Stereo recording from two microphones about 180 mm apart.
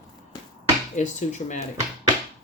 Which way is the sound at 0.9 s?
40° left (ahead or behind).